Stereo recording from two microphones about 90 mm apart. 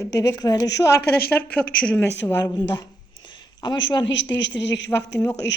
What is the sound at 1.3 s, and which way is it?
Speech, 15° left (ahead or behind).